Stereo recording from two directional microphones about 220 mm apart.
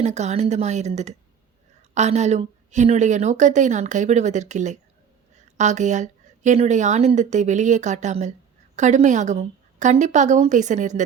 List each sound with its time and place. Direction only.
0.0 s a woman's voice: 30° right (ahead or behind)